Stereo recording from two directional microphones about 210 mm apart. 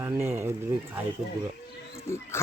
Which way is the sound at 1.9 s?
10° left (ahead or behind).